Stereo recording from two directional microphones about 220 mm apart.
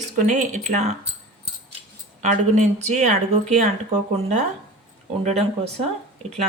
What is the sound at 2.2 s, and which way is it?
Speech, 30° right (ahead or behind).